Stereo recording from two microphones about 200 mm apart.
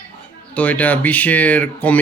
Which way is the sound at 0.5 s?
5° left (ahead or behind).